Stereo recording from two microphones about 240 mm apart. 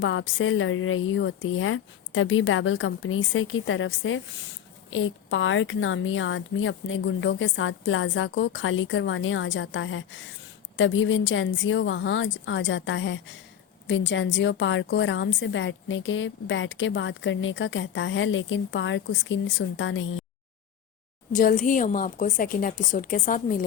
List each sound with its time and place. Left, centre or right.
0.0 s a woman's voice: left
21.3 s a woman's voice: left